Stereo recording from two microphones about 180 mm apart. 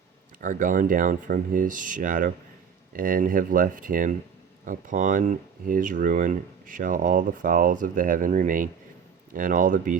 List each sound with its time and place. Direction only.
0.4 s speech: 45° right (ahead or behind)